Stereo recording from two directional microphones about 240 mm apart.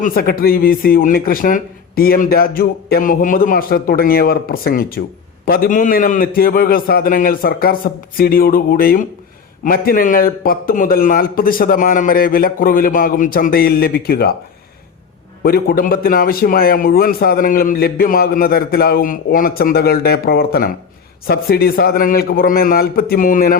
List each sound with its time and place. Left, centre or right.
0.0 s a man's voice: left
15.4 s a man's voice: left